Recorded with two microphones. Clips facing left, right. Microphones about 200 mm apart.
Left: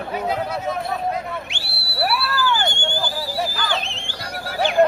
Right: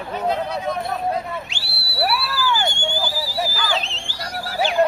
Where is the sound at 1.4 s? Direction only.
55° left (ahead or behind).